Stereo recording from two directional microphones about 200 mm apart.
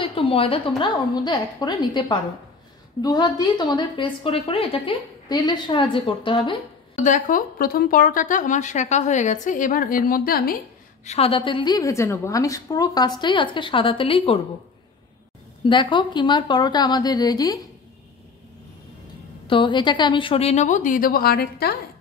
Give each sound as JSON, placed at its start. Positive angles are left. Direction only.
{"t": 0.0, "sound": "a woman's voice", "side_deg": 25}
{"t": 7.0, "sound": "speech", "side_deg": 40}
{"t": 11.1, "sound": "a woman's voice", "side_deg": 30}
{"t": 15.6, "sound": "a woman's voice", "side_deg": 25}
{"t": 19.4, "sound": "a woman's voice", "side_deg": 25}